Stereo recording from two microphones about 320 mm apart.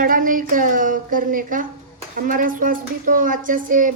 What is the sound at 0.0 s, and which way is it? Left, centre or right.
Speech, right.